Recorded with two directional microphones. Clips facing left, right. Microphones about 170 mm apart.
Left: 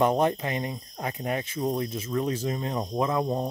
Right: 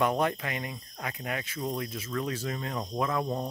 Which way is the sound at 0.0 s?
25° left (ahead or behind).